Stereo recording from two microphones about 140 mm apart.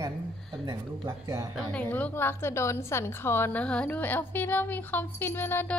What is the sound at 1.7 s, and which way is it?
A woman's voice, 10° left (ahead or behind).